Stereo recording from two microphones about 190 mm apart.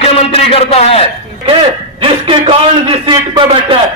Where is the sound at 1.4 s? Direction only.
30° right (ahead or behind).